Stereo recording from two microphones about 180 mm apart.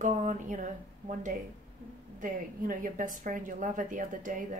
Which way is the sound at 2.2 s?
45° right (ahead or behind).